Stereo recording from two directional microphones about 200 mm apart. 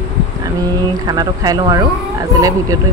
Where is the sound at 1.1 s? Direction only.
20° right (ahead or behind).